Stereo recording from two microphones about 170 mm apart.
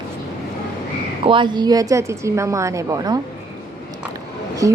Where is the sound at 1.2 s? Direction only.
30° right (ahead or behind).